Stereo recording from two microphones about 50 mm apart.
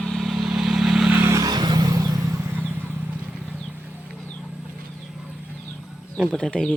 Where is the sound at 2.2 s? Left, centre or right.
Right.